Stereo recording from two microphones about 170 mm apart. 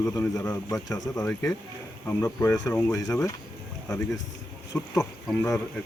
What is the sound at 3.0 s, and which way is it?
Speech, 20° left (ahead or behind).